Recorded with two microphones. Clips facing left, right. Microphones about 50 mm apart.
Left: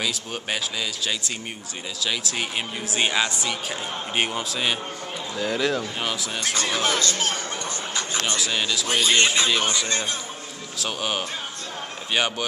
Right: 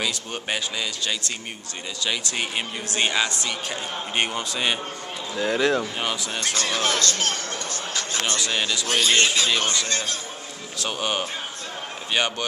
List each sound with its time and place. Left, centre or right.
0.0 s a man's voice: centre
6.6 s music: centre
8.4 s a man's voice: centre
8.8 s speech: centre
10.8 s a man's voice: centre